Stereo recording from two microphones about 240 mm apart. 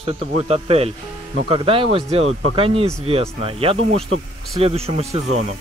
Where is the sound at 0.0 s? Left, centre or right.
Right.